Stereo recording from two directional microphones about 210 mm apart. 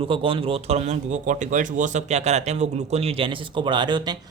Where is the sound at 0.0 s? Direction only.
25° right (ahead or behind).